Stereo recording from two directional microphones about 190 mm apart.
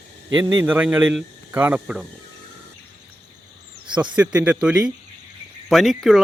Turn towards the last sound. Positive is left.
turn(degrees=0)  # may be behind; listen again after turning